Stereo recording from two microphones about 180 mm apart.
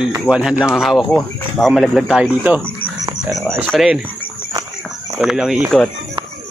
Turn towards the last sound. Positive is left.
turn(degrees=0)  # may be behind; listen again after turning